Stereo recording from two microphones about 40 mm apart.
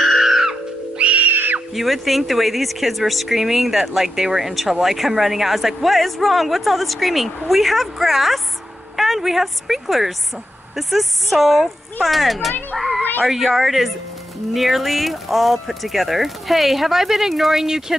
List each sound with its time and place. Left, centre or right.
0.0 s music: centre
0.9 s music: right
1.7 s speech: centre